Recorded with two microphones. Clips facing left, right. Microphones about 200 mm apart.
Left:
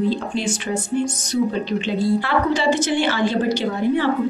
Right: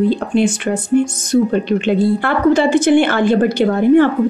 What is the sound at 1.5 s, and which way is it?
A woman's voice, 55° right (ahead or behind).